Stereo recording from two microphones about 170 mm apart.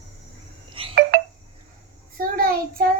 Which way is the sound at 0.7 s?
30° right (ahead or behind).